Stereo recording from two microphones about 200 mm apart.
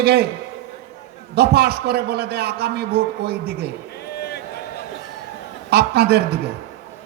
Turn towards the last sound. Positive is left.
turn(degrees=-55)  # may be behind; listen again after turning